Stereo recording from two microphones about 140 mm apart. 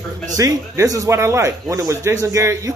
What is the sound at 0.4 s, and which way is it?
Speech, 25° right (ahead or behind).